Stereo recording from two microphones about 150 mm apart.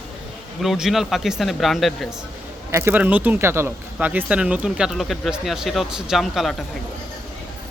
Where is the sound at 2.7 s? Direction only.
15° right (ahead or behind).